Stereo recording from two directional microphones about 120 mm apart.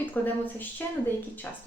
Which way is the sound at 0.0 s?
15° left (ahead or behind).